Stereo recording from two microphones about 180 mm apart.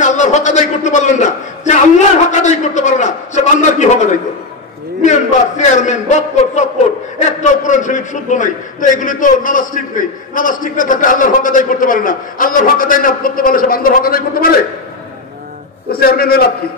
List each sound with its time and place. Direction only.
0.0 s a man's voice: 40° left (ahead or behind)
5.6 s a man's voice: 40° left (ahead or behind)
15.9 s a man's voice: 55° left (ahead or behind)